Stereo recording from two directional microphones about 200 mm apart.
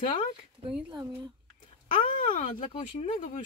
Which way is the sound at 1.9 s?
40° left (ahead or behind).